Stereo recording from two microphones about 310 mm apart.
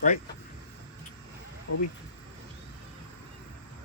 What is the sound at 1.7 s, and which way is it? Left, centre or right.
Speech, left.